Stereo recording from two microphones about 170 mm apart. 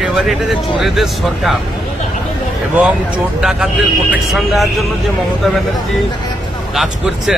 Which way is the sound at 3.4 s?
5° right (ahead or behind).